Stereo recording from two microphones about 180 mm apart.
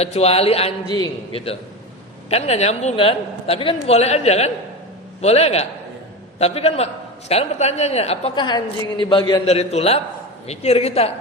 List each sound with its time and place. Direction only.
0.0 s a man's voice: 35° left (ahead or behind)